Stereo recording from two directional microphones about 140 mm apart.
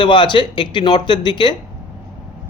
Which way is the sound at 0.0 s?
35° left (ahead or behind).